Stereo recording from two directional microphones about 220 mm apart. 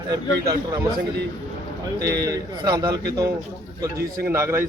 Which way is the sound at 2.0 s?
50° right (ahead or behind).